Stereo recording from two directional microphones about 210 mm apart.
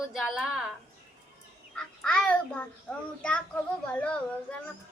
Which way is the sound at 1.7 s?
5° left (ahead or behind).